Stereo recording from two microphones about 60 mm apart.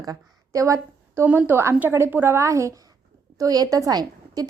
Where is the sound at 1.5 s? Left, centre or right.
Right.